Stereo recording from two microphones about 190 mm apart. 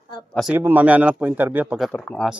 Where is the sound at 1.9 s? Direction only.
5° left (ahead or behind).